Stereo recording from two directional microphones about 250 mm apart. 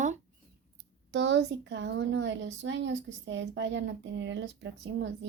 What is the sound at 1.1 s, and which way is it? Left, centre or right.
Speech, right.